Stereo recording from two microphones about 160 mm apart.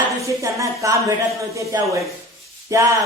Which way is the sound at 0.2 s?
20° right (ahead or behind).